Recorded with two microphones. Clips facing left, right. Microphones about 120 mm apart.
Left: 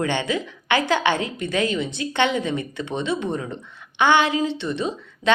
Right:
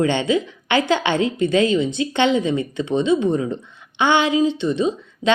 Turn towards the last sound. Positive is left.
turn(degrees=-20)  # may be behind; listen again after turning